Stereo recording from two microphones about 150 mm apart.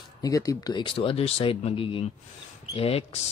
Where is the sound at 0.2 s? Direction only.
25° left (ahead or behind).